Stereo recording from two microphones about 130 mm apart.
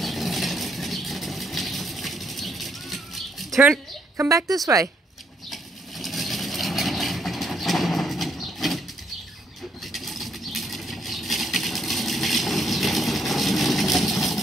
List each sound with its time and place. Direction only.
0.0 s a sound: centre (ahead or behind)
4.2 s a woman's voice: 15° right (ahead or behind)
5.5 s vehicle: centre (ahead or behind)
9.9 s bird flight: centre (ahead or behind)